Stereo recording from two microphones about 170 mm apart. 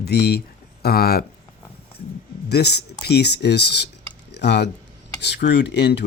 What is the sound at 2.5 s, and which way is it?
Speech, 70° left (ahead or behind).